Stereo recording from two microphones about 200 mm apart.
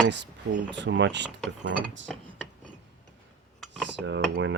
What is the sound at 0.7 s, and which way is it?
Speech, 65° right (ahead or behind).